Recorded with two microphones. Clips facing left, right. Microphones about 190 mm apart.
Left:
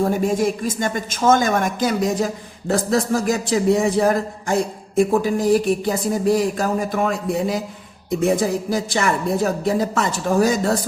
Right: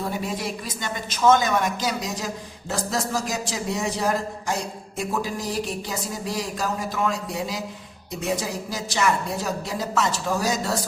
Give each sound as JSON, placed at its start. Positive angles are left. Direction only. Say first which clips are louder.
{"t": 0.0, "sound": "a woman's voice", "louder": "left 10 dB", "side_deg": 45}